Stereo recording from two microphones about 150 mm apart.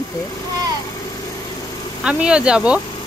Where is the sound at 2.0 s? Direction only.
5° right (ahead or behind).